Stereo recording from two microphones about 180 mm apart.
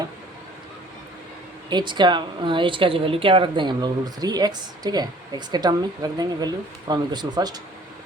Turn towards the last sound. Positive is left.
turn(degrees=-20)  # may be behind; listen again after turning